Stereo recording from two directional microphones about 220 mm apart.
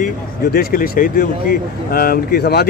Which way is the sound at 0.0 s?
45° left (ahead or behind).